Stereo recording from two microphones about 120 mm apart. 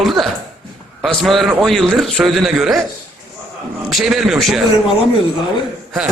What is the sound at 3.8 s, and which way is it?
Speech, centre (ahead or behind).